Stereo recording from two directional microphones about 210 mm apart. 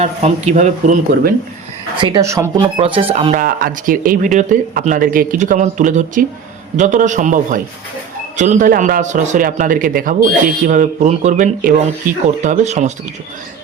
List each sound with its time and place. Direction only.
0.0 s speech: 30° right (ahead or behind)
2.0 s speech: 20° right (ahead or behind)
2.7 s speech: 25° right (ahead or behind)
3.4 s speech: 40° right (ahead or behind)